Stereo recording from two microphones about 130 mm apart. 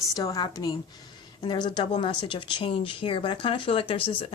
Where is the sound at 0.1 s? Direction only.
30° left (ahead or behind).